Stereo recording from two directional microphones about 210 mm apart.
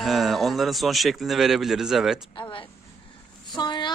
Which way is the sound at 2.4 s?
25° left (ahead or behind).